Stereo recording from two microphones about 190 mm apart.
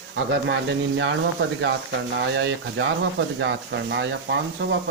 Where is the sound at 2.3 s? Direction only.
65° right (ahead or behind).